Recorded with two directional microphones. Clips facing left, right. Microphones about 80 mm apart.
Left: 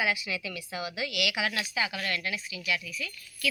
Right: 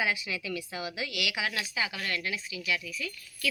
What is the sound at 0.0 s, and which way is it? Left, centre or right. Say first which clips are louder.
A woman's voice: left 1 dB; right.